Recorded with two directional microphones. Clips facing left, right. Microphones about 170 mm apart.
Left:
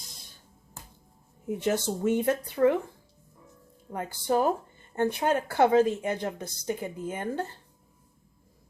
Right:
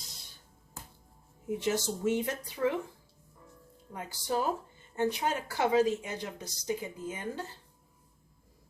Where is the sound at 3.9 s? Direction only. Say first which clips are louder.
Left 6 dB; 55° left (ahead or behind).